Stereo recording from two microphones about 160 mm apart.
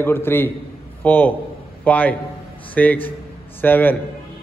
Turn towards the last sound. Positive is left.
turn(degrees=10)  # may be behind; listen again after turning